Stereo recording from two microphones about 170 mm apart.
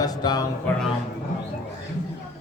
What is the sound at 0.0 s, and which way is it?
Music, 25° left (ahead or behind).